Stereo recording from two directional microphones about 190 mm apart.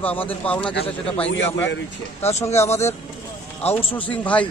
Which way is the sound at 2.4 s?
15° left (ahead or behind).